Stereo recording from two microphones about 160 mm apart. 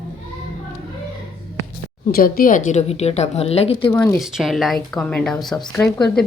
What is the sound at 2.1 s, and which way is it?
Speech, 70° left (ahead or behind).